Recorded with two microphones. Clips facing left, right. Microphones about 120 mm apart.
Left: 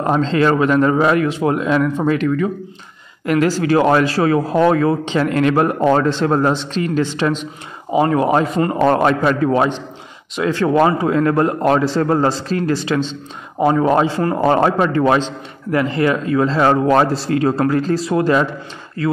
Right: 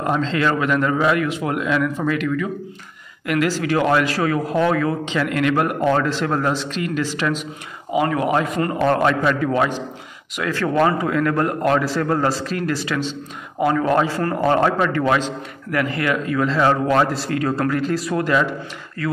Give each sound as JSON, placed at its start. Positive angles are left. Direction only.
{"t": 0.0, "sound": "a man's voice", "side_deg": 35}